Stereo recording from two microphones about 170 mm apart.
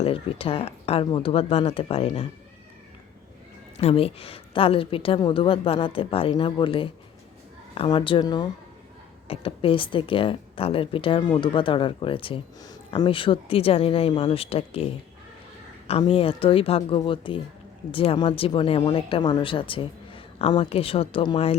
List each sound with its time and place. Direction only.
0.0 s speech: 35° left (ahead or behind)
3.8 s speech: 35° left (ahead or behind)